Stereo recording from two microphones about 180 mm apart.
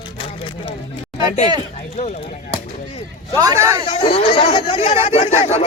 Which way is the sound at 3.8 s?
30° left (ahead or behind).